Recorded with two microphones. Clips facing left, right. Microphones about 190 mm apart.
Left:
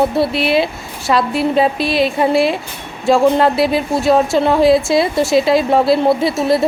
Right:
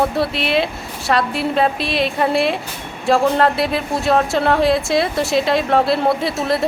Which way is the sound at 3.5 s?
Centre (ahead or behind).